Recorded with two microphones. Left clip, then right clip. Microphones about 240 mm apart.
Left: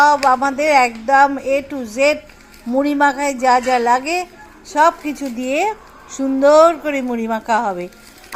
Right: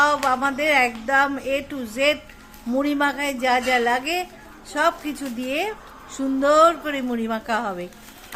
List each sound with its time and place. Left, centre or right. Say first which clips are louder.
0.0 s speech: left 7 dB; centre